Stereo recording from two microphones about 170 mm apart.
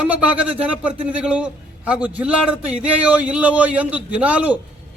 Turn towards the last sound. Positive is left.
turn(degrees=-10)  # may be behind; listen again after turning